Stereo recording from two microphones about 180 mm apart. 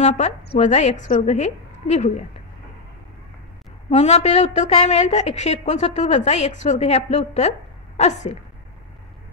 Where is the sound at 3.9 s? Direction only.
35° left (ahead or behind).